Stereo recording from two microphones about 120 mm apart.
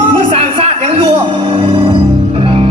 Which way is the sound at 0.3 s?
60° right (ahead or behind).